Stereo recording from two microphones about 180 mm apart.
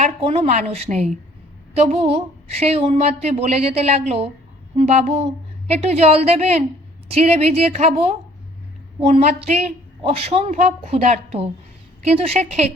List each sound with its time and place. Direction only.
0.0 s a woman's voice: 35° right (ahead or behind)